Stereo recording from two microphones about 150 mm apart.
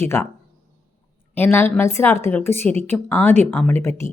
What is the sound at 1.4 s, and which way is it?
A woman's voice, 15° left (ahead or behind).